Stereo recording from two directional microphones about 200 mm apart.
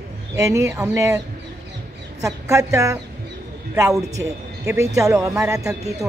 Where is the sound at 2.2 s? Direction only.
15° right (ahead or behind).